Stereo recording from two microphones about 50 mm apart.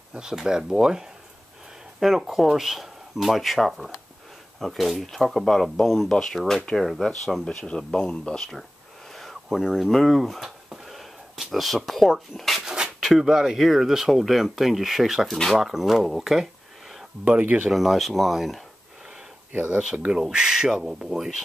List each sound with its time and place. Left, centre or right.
0.1 s speech: centre
7.4 s speech: centre
9.1 s a sound: centre
9.8 s speech: centre
12.6 s a sound: centre
13.1 s speech: centre
15.2 s speech: centre
15.6 s speech: centre
17.2 s speech: right
17.6 s speech: centre
19.5 s speech: right
20.1 s speech: centre